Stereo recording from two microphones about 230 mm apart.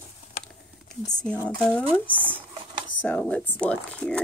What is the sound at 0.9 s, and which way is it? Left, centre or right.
Speech, centre.